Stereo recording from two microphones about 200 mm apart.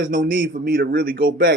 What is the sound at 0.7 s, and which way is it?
Speech, 50° right (ahead or behind).